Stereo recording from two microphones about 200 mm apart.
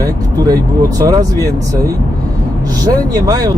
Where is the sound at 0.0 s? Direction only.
20° right (ahead or behind).